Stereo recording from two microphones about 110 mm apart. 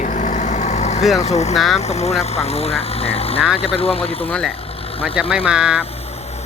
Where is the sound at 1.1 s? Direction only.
85° left; by 4.3 s 65° left (ahead or behind).